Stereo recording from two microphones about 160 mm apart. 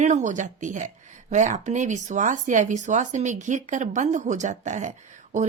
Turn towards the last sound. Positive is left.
turn(degrees=-50)  # may be behind; listen again after turning